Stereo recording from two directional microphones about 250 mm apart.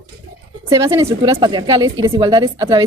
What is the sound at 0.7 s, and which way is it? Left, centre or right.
A woman's voice, centre.